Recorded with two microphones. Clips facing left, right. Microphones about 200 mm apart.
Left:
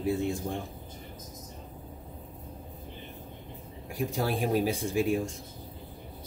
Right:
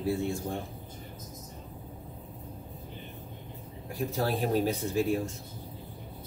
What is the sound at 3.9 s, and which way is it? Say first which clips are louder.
Speech: even; 15° left (ahead or behind).